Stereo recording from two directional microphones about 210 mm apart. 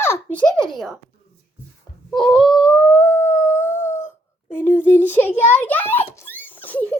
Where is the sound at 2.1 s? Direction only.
Centre (ahead or behind).